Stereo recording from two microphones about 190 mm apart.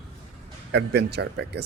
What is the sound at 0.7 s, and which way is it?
Speech, 60° right (ahead or behind).